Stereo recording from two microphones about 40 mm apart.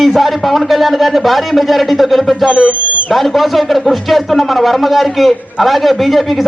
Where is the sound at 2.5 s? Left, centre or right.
Right.